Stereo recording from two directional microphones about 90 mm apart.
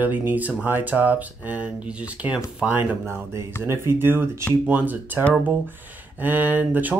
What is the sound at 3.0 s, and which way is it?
Speech, 30° right (ahead or behind).